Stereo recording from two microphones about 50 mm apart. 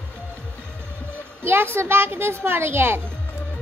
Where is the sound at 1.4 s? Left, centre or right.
Right.